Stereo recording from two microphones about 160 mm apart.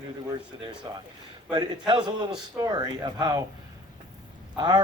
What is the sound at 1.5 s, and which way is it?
Speech, 30° right (ahead or behind).